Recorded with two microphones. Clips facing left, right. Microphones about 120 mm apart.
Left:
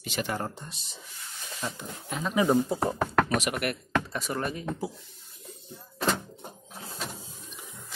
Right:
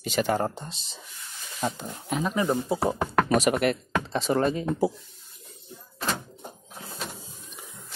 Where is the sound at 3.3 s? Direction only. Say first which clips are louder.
Right 7 dB; 30° right (ahead or behind).